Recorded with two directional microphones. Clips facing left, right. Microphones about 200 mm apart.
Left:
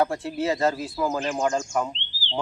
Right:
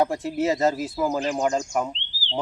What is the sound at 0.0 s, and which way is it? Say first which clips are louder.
Speech: right 2 dB; 20° right (ahead or behind).